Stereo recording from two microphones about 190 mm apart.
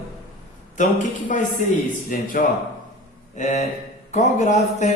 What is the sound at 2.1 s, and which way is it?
Speech, 45° left (ahead or behind).